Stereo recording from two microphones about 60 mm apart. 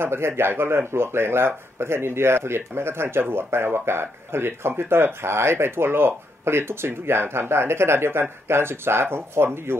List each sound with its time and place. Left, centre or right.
0.0 s speech: right